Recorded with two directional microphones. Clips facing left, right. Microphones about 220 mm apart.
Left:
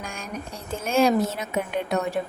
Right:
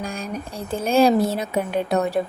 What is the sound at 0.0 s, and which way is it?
Speech, 35° right (ahead or behind).